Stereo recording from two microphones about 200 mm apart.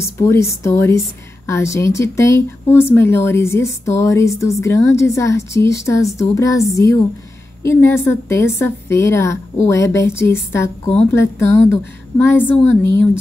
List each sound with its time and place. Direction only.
0.0 s a woman's voice: 15° left (ahead or behind)